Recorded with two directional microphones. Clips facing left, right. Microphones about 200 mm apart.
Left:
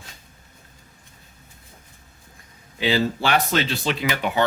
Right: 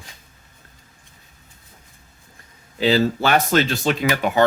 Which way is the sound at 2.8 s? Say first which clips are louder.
Right 4 dB; 40° right (ahead or behind).